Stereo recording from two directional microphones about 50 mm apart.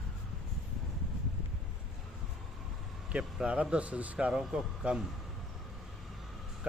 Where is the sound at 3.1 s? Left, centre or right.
Right.